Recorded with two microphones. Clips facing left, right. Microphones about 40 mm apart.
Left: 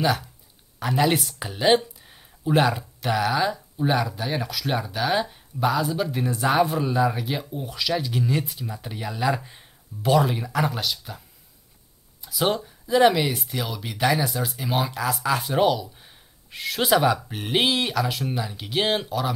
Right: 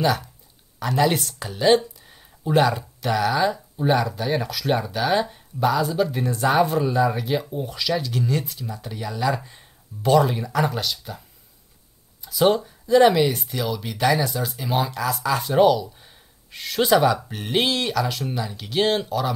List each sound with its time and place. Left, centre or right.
0.7 s speech: centre
2.0 s speech: centre
12.3 s speech: centre